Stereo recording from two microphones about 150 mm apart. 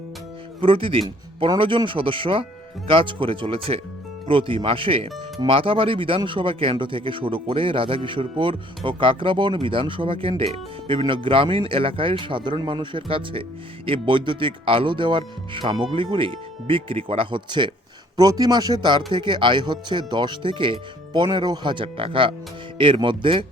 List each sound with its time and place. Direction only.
0.6 s speech: 40° right (ahead or behind)